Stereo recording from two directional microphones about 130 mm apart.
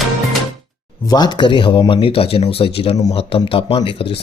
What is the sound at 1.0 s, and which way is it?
Speech, 30° left (ahead or behind).